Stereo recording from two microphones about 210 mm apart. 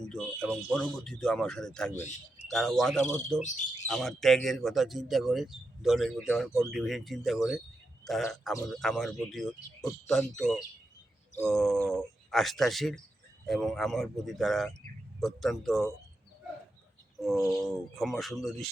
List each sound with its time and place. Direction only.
0.0 s speech: 5° left (ahead or behind)
3.4 s speech: 35° left (ahead or behind)
3.8 s speech: centre (ahead or behind)
17.2 s speech: centre (ahead or behind)